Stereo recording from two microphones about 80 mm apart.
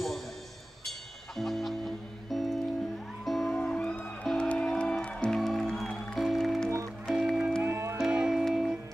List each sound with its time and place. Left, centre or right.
0.8 s music: centre
7.6 s music: right
8.1 s music: centre